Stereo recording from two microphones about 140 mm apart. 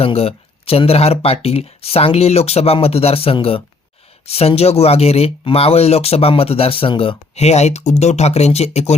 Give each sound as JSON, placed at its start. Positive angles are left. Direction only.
{"t": 0.0, "sound": "speech", "side_deg": 45}